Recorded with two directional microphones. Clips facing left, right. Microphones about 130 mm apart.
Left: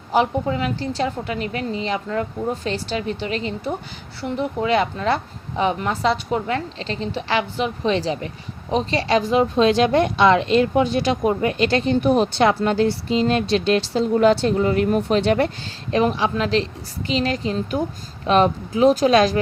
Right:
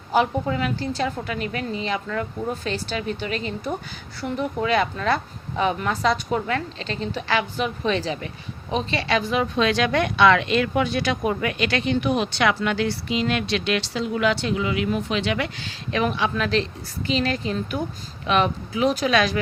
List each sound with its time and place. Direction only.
0.1 s a woman's voice: 25° left (ahead or behind)
4.6 s a woman's voice: 25° left (ahead or behind)